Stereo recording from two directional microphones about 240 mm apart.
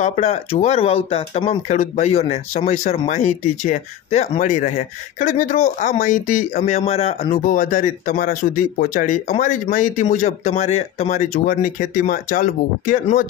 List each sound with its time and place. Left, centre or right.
0.0 s speech: left